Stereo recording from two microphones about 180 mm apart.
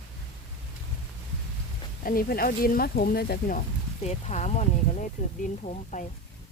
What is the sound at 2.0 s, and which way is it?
Speech, 55° left (ahead or behind).